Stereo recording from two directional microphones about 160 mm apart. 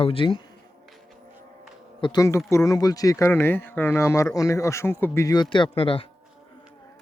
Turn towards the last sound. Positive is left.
turn(degrees=35)  # may be behind; listen again after turning